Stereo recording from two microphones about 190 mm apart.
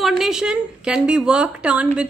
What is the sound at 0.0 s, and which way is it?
A woman's voice, centre (ahead or behind).